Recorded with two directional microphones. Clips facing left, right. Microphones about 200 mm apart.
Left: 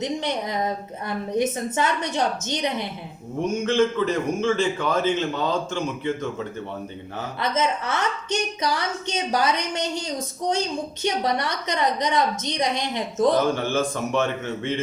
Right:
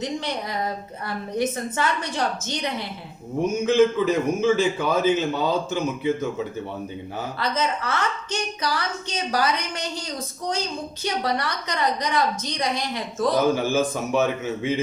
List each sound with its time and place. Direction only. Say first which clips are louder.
0.0 s a woman's voice: left 2 dB; 20° left (ahead or behind)
3.6 s a man's voice: right 3 dB; 5° right (ahead or behind)
7.3 s a woman's voice: left 2 dB; 20° left (ahead or behind)
13.4 s a man's voice: right 2 dB; 5° right (ahead or behind)